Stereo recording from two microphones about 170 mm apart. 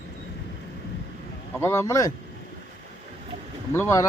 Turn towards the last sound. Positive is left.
turn(degrees=15)  # may be behind; listen again after turning